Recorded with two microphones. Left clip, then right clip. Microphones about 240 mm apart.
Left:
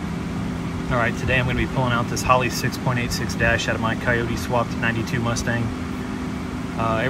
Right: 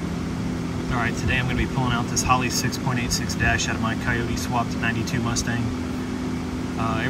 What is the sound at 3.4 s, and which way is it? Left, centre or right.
Speech, left.